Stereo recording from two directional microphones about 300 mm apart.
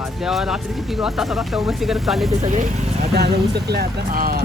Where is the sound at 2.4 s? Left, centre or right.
Right.